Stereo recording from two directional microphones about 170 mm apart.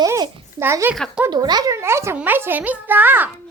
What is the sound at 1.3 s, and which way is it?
A child's voice, 25° right (ahead or behind).